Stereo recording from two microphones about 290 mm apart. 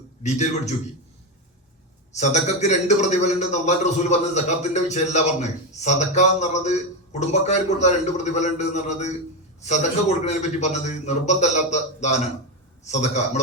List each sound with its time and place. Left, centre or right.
0.2 s a man's voice: left
2.1 s a man's voice: left